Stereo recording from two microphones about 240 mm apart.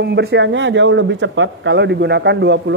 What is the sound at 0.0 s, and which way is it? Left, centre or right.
Speech, right.